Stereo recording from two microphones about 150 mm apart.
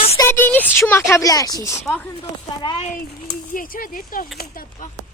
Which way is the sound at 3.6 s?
70° left (ahead or behind).